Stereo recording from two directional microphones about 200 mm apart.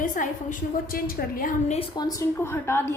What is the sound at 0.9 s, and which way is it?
A woman's voice, 45° left (ahead or behind).